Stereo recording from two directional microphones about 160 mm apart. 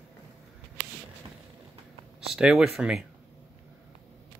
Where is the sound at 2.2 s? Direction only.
5° right (ahead or behind).